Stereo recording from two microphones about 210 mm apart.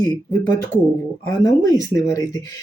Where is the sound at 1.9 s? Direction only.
15° left (ahead or behind).